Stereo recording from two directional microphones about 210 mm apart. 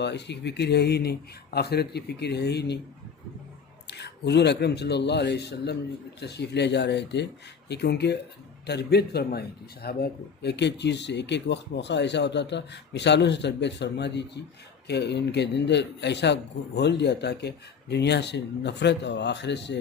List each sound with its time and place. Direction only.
0.0 s speech: 55° left (ahead or behind)
3.8 s a man's voice: 55° left (ahead or behind)